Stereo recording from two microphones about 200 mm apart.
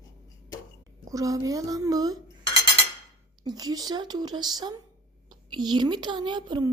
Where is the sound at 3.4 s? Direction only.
20° right (ahead or behind).